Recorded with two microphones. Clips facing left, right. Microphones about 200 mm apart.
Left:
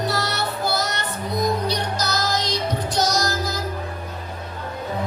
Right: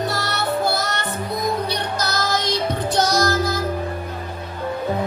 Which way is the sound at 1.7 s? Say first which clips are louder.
Even; 55° right (ahead or behind).